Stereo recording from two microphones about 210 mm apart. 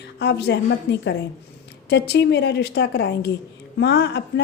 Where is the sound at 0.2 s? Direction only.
55° left (ahead or behind).